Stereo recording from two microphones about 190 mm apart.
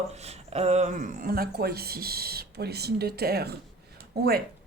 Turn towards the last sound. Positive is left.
turn(degrees=-55)  # may be behind; listen again after turning